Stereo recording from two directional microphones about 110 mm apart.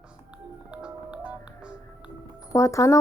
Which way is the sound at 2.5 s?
30° left (ahead or behind).